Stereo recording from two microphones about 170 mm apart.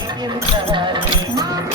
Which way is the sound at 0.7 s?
25° right (ahead or behind).